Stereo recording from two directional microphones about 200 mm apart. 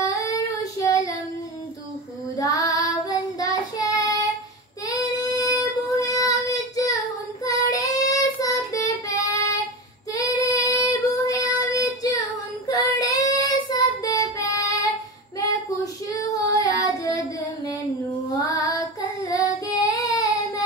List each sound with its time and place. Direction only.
0.0 s child singing: 15° left (ahead or behind)
2.3 s child singing: 15° left (ahead or behind)
10.1 s female singing: 15° left (ahead or behind)
11.1 s child singing: 15° left (ahead or behind)